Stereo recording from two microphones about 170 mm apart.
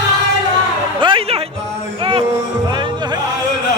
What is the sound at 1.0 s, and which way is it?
Music, 30° right (ahead or behind).